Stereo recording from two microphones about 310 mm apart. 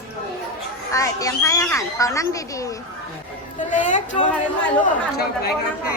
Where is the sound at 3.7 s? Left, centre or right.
Left.